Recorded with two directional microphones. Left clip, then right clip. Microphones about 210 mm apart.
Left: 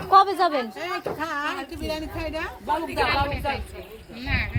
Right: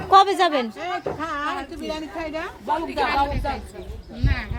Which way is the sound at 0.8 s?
35° left (ahead or behind).